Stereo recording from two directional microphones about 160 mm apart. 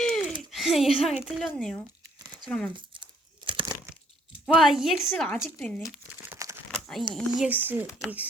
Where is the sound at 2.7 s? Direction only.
30° right (ahead or behind).